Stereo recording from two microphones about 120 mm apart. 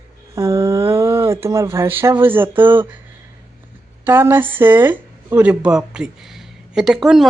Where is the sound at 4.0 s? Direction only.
20° right (ahead or behind).